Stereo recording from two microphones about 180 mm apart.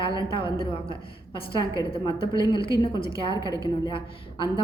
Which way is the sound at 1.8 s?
25° left (ahead or behind).